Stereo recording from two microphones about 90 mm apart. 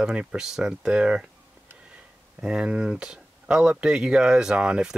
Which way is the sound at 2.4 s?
10° right (ahead or behind).